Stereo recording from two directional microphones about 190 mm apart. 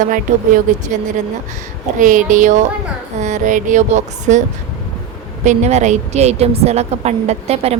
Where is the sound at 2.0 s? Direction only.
45° right (ahead or behind).